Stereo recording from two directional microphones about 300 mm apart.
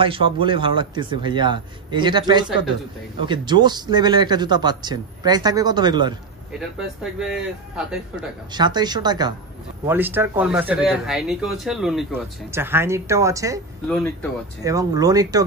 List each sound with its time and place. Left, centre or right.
0.0 s speech: centre
6.8 s speech: centre
8.5 s speech: centre
13.8 s speech: centre
14.6 s speech: centre